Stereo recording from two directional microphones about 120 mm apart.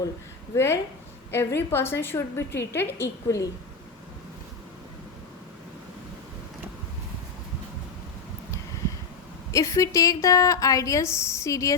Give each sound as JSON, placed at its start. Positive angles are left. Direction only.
{"t": 0.5, "sound": "a woman's voice", "side_deg": 20}
{"t": 9.5, "sound": "a woman's voice", "side_deg": 25}